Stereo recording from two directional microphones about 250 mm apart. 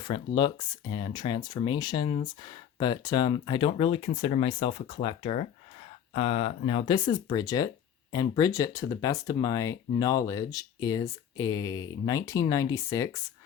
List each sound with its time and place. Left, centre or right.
0.0 s speech: centre